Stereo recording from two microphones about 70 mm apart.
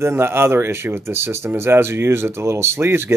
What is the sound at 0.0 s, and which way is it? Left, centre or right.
Speech, right.